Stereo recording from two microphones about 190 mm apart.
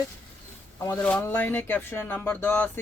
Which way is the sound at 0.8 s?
10° left (ahead or behind).